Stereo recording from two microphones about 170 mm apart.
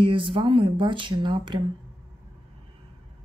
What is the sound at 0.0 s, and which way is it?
Speech, 30° right (ahead or behind).